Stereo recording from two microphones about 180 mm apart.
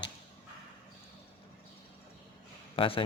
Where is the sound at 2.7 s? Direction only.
30° left (ahead or behind).